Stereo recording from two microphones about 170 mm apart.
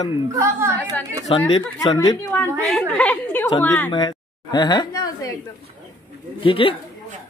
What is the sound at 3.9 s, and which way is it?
A woman's voice, 25° left (ahead or behind).